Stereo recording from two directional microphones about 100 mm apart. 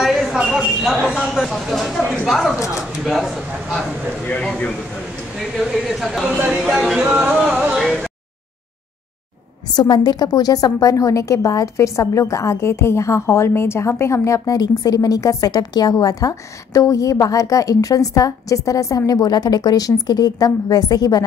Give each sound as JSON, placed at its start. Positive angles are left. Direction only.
{"t": 0.0, "sound": "speech", "side_deg": 0}
{"t": 5.4, "sound": "speech", "side_deg": -5}
{"t": 9.8, "sound": "a woman's voice", "side_deg": 45}